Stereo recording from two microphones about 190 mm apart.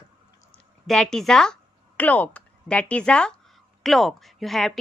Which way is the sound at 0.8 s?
Centre (ahead or behind).